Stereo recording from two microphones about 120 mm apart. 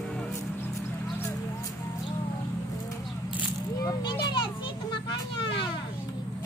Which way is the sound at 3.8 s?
30° left (ahead or behind).